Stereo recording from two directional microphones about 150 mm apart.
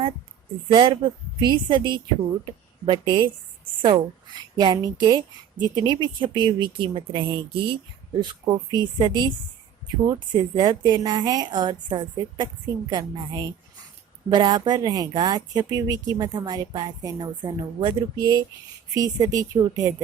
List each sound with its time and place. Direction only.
0.7 s a woman's voice: 35° right (ahead or behind)
8.5 s a woman's voice: 25° right (ahead or behind)